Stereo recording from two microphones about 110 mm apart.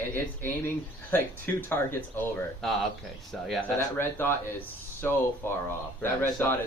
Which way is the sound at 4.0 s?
20° left (ahead or behind).